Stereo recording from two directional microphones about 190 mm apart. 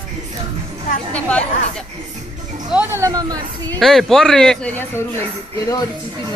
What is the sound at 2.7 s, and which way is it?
Speech, 10° right (ahead or behind).